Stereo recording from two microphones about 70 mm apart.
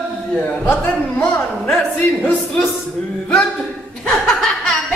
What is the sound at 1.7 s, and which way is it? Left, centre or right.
Speech, centre.